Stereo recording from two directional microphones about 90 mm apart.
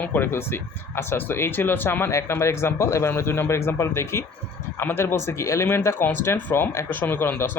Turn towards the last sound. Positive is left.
turn(degrees=25)  # may be behind; listen again after turning